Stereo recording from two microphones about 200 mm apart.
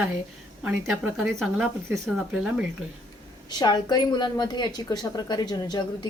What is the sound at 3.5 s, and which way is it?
A woman's voice, 20° left (ahead or behind).